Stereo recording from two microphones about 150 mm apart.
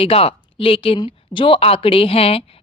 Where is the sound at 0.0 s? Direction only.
40° left (ahead or behind).